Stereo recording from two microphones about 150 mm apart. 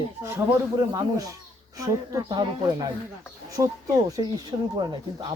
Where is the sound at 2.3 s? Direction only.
30° right (ahead or behind).